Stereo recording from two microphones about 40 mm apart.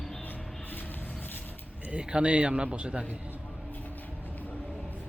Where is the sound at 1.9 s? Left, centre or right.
Right.